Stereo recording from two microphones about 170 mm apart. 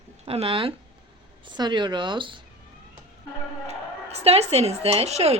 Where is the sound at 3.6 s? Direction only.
40° right (ahead or behind).